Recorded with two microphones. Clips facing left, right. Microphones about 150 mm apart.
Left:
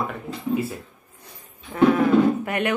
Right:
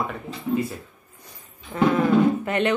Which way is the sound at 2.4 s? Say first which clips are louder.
Right 2 dB; 10° left (ahead or behind).